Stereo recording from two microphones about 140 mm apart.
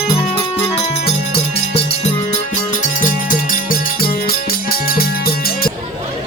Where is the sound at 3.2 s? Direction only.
80° left.